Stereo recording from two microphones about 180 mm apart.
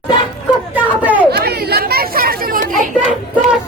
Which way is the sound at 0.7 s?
10° right (ahead or behind).